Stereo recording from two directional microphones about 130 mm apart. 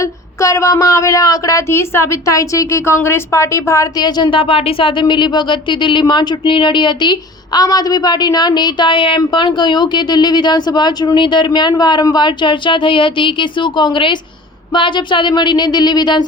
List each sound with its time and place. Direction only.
0.0 s speech: 25° left (ahead or behind)